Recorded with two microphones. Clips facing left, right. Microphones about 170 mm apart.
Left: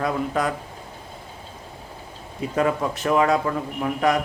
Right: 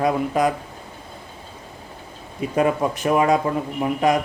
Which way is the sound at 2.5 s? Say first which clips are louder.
Right 3 dB; 20° right (ahead or behind).